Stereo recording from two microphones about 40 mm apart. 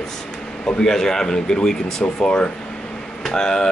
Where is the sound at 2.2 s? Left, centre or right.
Left.